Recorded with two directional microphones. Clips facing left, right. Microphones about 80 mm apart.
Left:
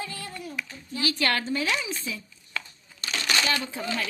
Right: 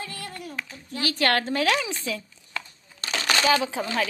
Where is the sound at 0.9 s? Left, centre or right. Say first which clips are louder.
Right 3 dB; right.